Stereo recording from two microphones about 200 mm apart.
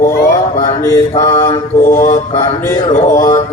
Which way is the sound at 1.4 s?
10° left (ahead or behind).